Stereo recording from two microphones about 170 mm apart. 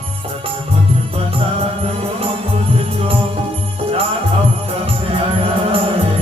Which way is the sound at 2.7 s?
35° right (ahead or behind).